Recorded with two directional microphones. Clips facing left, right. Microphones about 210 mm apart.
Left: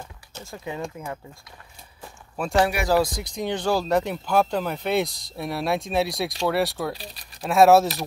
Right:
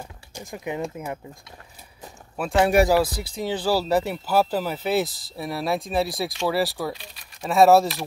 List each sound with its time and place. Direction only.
0.3 s speech: 15° right (ahead or behind)
2.3 s speech: 5° right (ahead or behind)